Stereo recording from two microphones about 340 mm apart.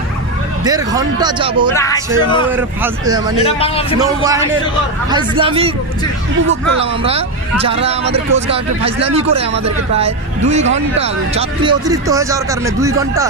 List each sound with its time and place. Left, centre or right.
0.7 s speech: centre
1.7 s speech: centre
2.5 s speech: centre
3.3 s speech: centre
4.0 s speech: centre
7.6 s speech: centre